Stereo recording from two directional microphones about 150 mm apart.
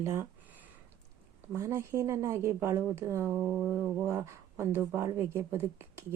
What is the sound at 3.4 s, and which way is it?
Mantra, 5° right (ahead or behind).